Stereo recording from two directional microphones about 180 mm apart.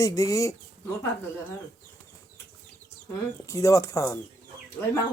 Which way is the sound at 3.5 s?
20° left (ahead or behind).